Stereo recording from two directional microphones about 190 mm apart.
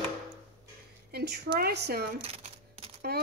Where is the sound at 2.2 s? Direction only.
30° right (ahead or behind).